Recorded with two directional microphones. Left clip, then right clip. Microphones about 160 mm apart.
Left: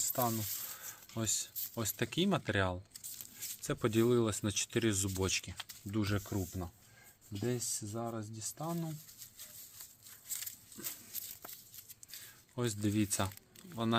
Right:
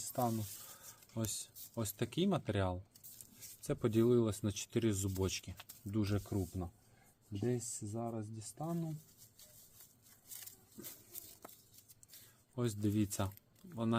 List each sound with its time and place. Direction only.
0.8 s speech: 20° left (ahead or behind)
8.6 s speech: 20° left (ahead or behind)
10.8 s speech: 20° left (ahead or behind)
12.5 s speech: 10° left (ahead or behind)